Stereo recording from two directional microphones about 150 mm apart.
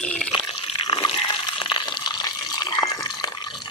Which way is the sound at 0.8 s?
35° left (ahead or behind).